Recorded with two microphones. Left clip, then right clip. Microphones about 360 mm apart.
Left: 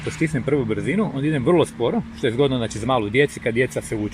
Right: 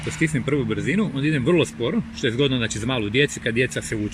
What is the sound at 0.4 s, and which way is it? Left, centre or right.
Speech, centre.